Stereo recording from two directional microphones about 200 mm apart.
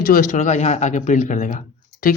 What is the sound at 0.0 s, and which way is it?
Speech, 45° left (ahead or behind).